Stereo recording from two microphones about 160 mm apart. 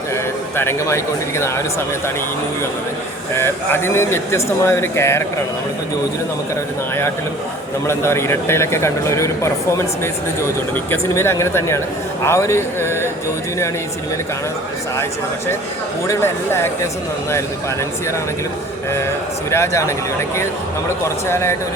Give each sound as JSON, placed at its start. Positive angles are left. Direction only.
{"t": 0.5, "sound": "speech", "side_deg": 15}
{"t": 3.3, "sound": "speech", "side_deg": 15}
{"t": 7.9, "sound": "speech", "side_deg": 15}
{"t": 16.0, "sound": "speech", "side_deg": 15}
{"t": 19.5, "sound": "speech", "side_deg": 15}
{"t": 21.2, "sound": "speech", "side_deg": 15}